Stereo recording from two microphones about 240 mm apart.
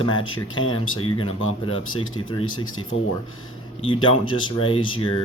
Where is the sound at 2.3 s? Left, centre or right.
Centre.